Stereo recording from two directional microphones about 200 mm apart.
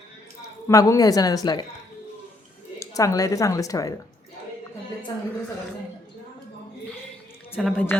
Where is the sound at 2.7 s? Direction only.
15° left (ahead or behind).